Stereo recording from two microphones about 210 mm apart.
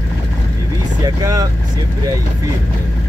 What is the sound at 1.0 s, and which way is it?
Speech, 15° right (ahead or behind).